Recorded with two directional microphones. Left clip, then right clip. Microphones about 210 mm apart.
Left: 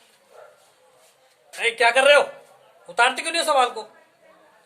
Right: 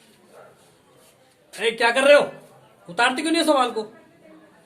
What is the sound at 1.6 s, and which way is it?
A man's voice, 30° left (ahead or behind).